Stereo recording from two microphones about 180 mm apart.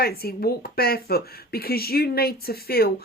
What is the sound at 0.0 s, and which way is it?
Speech, 60° left (ahead or behind).